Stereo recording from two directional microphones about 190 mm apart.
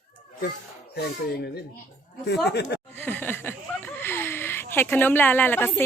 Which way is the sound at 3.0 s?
10° left (ahead or behind).